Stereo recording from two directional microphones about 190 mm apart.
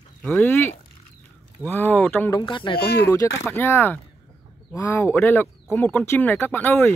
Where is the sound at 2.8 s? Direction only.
55° left (ahead or behind).